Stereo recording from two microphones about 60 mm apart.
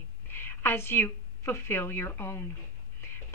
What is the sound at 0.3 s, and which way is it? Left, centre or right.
A woman's voice, left.